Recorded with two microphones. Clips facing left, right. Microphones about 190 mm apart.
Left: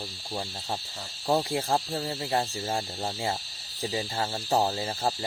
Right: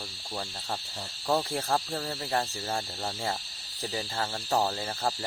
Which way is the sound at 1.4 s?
15° left (ahead or behind).